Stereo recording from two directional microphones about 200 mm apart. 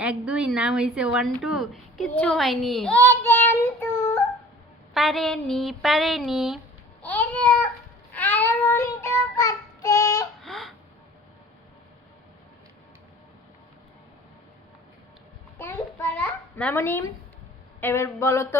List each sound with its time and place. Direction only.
0.0 s a woman's voice: 5° right (ahead or behind); by 4.2 s 10° left (ahead or behind)
4.9 s a woman's voice: centre (ahead or behind)
7.0 s babbling: 5° left (ahead or behind)
8.1 s child singing: 10° left (ahead or behind)
10.4 s a sound: centre (ahead or behind)
15.5 s a child's voice: 15° left (ahead or behind)
17.7 s a sound: 10° left (ahead or behind)